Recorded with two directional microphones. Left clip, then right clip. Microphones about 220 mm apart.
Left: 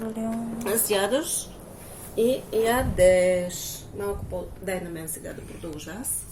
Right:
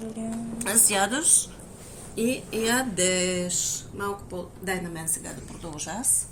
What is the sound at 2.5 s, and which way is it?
Speech, 50° right (ahead or behind).